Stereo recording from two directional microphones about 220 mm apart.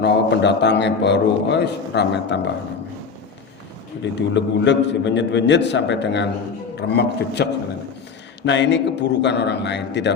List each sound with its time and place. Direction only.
0.0 s a man's voice: 50° left (ahead or behind)
4.4 s a man's voice: 55° left (ahead or behind)
8.4 s a man's voice: 55° left (ahead or behind)